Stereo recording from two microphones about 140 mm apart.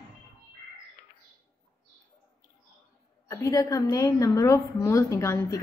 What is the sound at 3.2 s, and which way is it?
A woman's voice, 20° left (ahead or behind).